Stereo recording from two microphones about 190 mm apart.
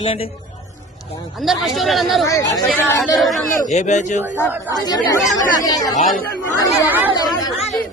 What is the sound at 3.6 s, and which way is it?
Speech, 40° left (ahead or behind).